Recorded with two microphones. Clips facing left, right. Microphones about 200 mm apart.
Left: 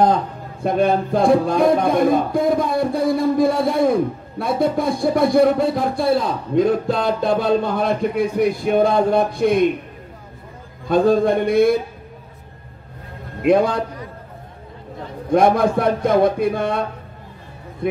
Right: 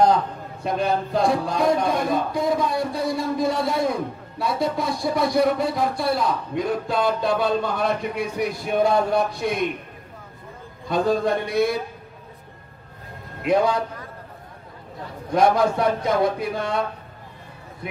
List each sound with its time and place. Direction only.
0.7 s music: 55° left (ahead or behind)
10.9 s music: 55° left (ahead or behind)
13.4 s a man's voice: 55° left (ahead or behind)
15.3 s music: 55° left (ahead or behind)